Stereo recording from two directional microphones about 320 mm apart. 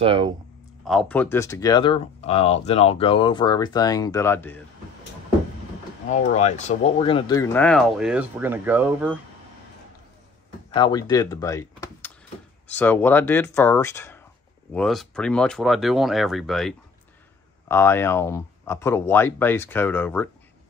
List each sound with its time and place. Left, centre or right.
0.0 s speech: centre
0.8 s speech: centre
6.3 s speech: left; by 9.1 s centre
10.7 s speech: centre